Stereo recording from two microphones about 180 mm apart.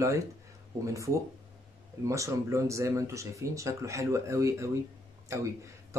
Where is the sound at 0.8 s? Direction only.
15° right (ahead or behind).